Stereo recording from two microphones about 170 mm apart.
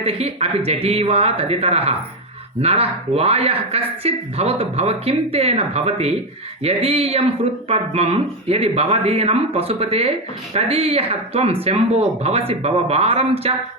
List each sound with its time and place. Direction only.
0.0 s speech: 35° right (ahead or behind)